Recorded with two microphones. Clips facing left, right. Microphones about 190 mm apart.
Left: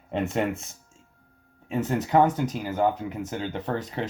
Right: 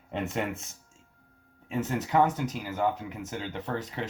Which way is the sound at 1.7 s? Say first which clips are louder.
Left 5 dB; 35° left (ahead or behind).